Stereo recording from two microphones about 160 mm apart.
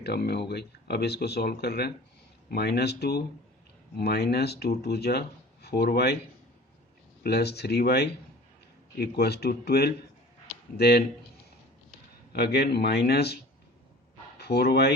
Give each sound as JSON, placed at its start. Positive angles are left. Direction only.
{"t": 0.0, "sound": "speech", "side_deg": 90}
{"t": 7.2, "sound": "speech", "side_deg": 85}
{"t": 12.3, "sound": "speech", "side_deg": 80}